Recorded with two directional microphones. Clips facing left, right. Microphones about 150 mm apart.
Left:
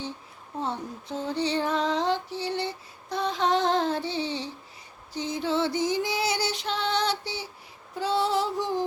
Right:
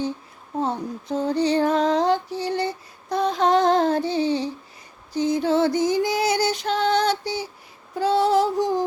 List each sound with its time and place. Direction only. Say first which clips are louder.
0.6 s female singing: right 6 dB; 40° right (ahead or behind)
5.1 s music: right 7 dB; 45° right (ahead or behind)
7.9 s female singing: right 7 dB; 45° right (ahead or behind)